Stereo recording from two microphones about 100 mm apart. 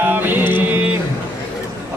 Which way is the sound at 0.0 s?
20° right (ahead or behind).